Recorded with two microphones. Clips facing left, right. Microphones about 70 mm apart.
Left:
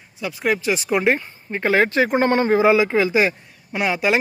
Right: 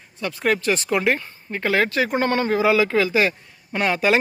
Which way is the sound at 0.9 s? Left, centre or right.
Left.